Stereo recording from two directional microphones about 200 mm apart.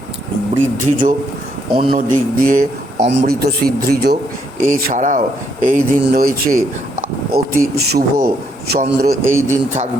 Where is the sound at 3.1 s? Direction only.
60° right (ahead or behind).